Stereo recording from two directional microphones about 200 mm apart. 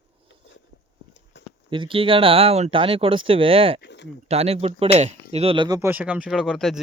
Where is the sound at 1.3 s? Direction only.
60° left (ahead or behind).